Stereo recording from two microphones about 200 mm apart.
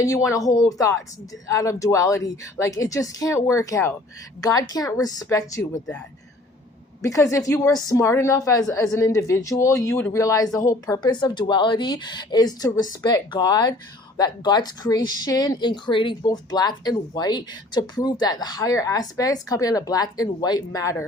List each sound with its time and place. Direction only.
0.0 s a woman's voice: 15° left (ahead or behind)
7.0 s a woman's voice: 15° left (ahead or behind)